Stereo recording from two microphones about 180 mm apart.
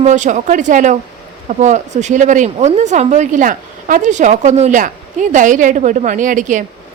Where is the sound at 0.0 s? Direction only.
40° right (ahead or behind).